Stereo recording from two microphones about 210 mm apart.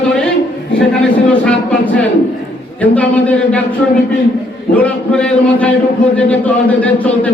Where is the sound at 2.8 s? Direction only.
5° left (ahead or behind).